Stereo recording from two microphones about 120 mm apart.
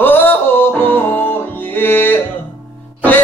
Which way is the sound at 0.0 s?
15° left (ahead or behind).